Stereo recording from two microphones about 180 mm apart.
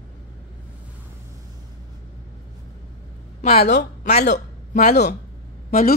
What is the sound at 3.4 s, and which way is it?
Speech, 35° left (ahead or behind).